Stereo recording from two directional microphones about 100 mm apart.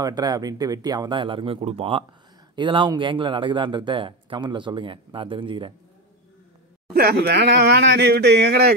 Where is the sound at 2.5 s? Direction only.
50° right (ahead or behind).